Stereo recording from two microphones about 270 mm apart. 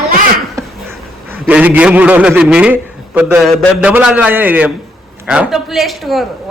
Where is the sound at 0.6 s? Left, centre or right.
Centre.